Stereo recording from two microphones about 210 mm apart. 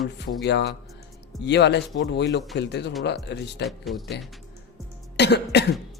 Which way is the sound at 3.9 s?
Centre (ahead or behind).